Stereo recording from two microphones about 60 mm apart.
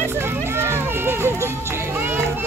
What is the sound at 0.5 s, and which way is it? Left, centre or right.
Run, right.